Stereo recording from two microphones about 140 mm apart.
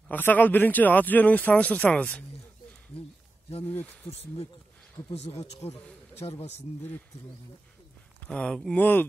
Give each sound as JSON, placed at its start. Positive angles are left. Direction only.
{"t": 0.1, "sound": "speech", "side_deg": 10}
{"t": 4.1, "sound": "speech", "side_deg": 50}
{"t": 8.3, "sound": "speech", "side_deg": 10}